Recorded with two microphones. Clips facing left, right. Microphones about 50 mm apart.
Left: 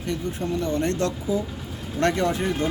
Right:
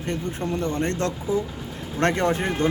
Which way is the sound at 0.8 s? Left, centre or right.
Right.